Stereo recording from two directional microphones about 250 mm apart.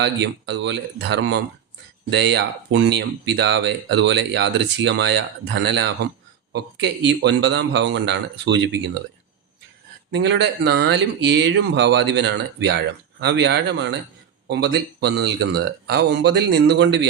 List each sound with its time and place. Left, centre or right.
0.0 s speech: right
10.1 s speech: right